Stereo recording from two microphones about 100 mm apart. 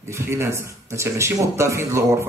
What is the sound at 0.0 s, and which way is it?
Speech, 30° right (ahead or behind).